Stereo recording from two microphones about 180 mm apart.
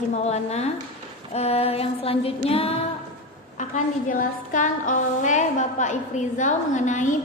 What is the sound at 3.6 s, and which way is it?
A woman's voice, 45° left (ahead or behind).